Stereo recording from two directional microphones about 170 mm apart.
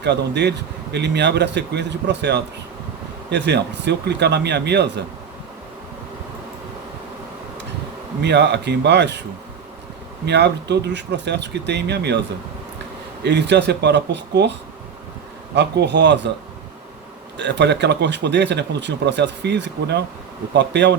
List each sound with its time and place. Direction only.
0.0 s speech: 85° right
8.2 s speech: 90° right
10.2 s speech: 85° right
13.2 s speech: 85° right
15.5 s speech: 85° right
17.3 s speech: 90° right